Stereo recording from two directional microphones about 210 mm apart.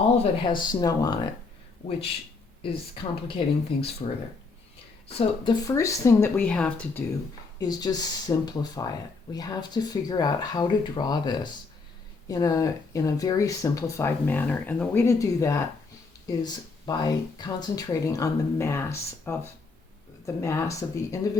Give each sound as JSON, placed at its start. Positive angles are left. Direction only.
{"t": 0.2, "sound": "speech", "side_deg": 25}
{"t": 2.6, "sound": "speech", "side_deg": 25}
{"t": 5.1, "sound": "speech", "side_deg": 20}
{"t": 7.6, "sound": "speech", "side_deg": 20}